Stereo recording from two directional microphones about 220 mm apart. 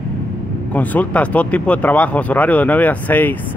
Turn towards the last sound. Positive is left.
turn(degrees=10)  # may be behind; listen again after turning